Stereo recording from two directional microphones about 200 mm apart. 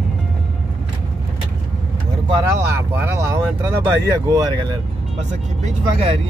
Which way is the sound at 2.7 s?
10° right (ahead or behind).